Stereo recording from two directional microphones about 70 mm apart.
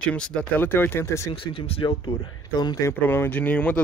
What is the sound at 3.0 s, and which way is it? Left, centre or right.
Speech, left.